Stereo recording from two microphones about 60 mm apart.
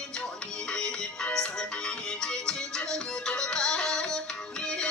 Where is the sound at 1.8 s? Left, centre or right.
Centre.